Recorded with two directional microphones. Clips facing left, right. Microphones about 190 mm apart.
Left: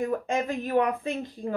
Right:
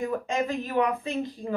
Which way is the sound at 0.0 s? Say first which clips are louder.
Left 1 dB; 50° left (ahead or behind).